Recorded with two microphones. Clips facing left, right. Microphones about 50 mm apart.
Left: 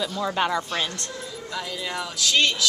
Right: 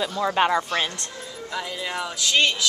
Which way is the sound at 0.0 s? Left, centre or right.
Right.